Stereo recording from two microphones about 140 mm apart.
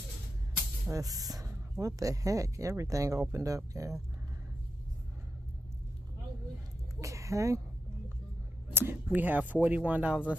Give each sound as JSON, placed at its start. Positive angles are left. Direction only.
{"t": 0.8, "sound": "speech", "side_deg": -25}
{"t": 7.0, "sound": "speech", "side_deg": -20}
{"t": 8.7, "sound": "speech", "side_deg": -15}